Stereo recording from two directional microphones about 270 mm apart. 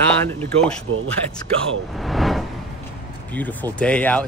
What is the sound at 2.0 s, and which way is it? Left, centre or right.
Speech, centre.